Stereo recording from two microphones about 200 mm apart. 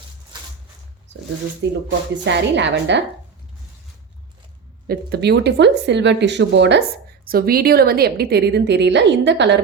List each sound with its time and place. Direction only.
1.6 s a woman's voice: 60° right (ahead or behind)
4.9 s a woman's voice: 50° right (ahead or behind)
7.3 s a woman's voice: 50° right (ahead or behind)